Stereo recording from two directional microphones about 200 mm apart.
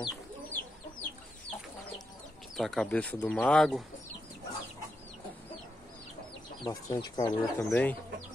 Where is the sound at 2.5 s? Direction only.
Centre (ahead or behind).